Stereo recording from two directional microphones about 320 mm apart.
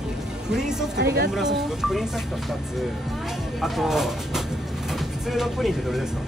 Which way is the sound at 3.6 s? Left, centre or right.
Centre.